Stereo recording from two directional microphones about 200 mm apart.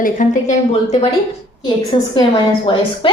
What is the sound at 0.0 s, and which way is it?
Speech, 40° left (ahead or behind).